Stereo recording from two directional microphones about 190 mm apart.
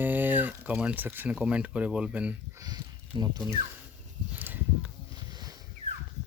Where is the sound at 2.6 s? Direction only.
20° right (ahead or behind).